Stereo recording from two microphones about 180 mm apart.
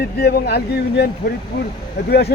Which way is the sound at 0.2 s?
60° left (ahead or behind).